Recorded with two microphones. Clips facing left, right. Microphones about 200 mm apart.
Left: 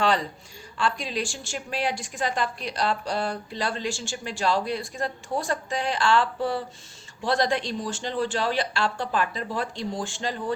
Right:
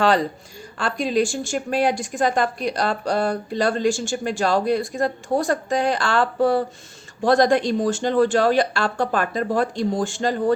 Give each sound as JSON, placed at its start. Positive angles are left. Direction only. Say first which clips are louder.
{"t": 0.0, "sound": "a woman's voice", "louder": "right 5 dB", "side_deg": -40}